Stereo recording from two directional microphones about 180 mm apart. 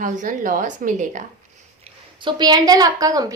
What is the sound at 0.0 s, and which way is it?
A woman's voice, 45° right (ahead or behind).